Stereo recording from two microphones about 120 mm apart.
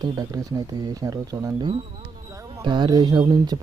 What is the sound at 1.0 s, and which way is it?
Speech, 30° right (ahead or behind).